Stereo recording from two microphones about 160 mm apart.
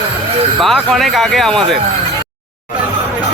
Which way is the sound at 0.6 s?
Centre (ahead or behind).